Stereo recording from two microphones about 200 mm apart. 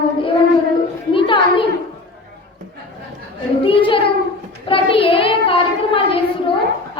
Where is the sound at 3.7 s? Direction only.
25° left (ahead or behind).